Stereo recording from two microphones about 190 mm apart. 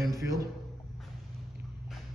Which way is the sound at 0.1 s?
15° right (ahead or behind).